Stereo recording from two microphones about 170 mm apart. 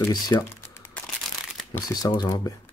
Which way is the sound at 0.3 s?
20° left (ahead or behind).